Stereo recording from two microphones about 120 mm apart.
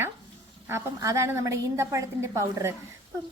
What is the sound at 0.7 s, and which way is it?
A woman's voice, 25° right (ahead or behind).